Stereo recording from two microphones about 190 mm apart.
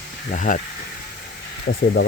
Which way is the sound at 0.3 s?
40° left (ahead or behind).